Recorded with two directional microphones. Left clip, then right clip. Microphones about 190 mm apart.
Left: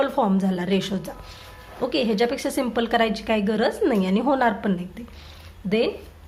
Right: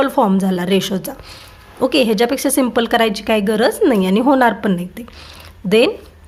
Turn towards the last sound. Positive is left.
turn(degrees=-40)  # may be behind; listen again after turning